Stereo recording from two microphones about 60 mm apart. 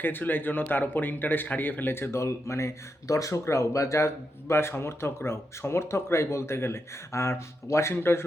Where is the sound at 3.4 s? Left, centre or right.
Left.